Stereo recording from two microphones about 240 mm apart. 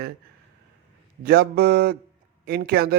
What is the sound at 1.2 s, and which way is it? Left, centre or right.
Speech, right.